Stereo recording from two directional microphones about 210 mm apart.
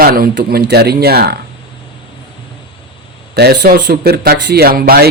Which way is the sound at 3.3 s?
50° right (ahead or behind).